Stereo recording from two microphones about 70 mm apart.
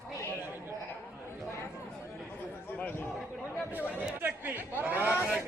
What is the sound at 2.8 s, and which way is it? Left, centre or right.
Speech, left.